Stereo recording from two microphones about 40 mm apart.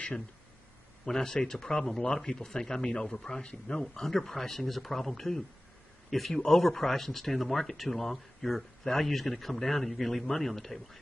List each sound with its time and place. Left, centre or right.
1.0 s speech: centre
3.9 s speech: centre